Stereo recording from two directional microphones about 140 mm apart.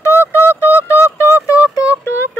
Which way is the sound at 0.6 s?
15° left (ahead or behind).